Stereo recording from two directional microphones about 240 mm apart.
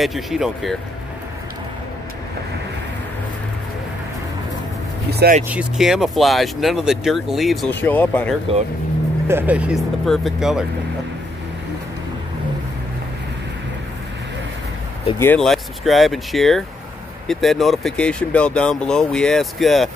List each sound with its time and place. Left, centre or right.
0.0 s speech: centre
5.1 s speech: right
5.5 s speech: centre
9.3 s speech: centre
15.1 s speech: centre